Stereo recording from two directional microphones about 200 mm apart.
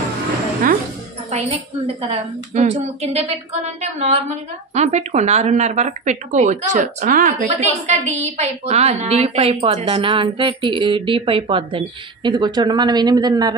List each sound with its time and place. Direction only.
1.3 s speech: 30° right (ahead or behind)